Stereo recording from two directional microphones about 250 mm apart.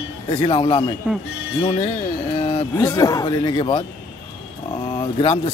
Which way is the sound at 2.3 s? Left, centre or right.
Left.